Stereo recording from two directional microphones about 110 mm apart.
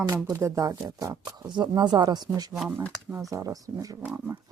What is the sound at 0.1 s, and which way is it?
Speech, 25° right (ahead or behind).